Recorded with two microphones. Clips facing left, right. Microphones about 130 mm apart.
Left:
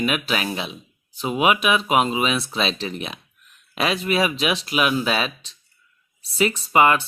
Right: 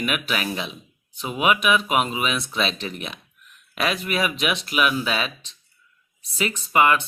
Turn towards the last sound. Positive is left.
turn(degrees=35)  # may be behind; listen again after turning